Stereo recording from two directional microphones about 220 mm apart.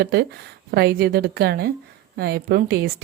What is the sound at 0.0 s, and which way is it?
Speech, 50° right (ahead or behind).